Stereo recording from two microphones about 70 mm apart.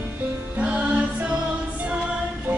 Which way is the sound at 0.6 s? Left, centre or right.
Centre.